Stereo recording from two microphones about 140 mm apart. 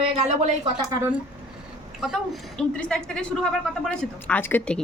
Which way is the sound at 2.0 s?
Centre (ahead or behind).